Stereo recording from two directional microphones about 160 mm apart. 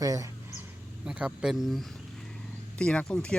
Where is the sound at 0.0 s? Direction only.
20° right (ahead or behind).